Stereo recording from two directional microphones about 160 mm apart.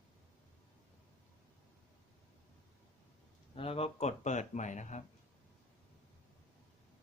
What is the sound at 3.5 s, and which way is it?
Speech, 35° left (ahead or behind).